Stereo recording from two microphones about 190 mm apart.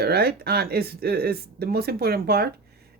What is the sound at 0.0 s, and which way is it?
Speech, 55° right (ahead or behind).